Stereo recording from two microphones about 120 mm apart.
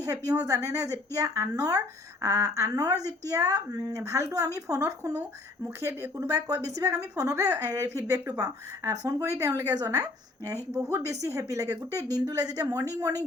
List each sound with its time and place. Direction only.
0.0 s speech: 30° right (ahead or behind)